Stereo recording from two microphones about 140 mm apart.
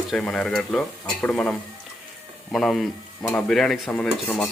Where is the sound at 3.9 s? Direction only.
10° left (ahead or behind).